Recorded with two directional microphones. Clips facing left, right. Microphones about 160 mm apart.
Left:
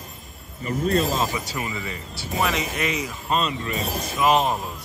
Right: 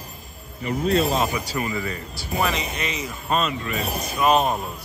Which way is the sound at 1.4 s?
20° left (ahead or behind).